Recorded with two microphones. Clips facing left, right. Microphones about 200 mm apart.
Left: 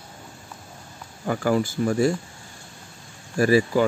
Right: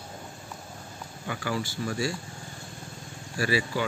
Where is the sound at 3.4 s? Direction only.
45° left (ahead or behind).